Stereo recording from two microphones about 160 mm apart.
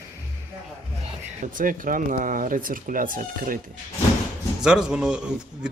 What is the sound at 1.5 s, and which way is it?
Speech, 55° right (ahead or behind).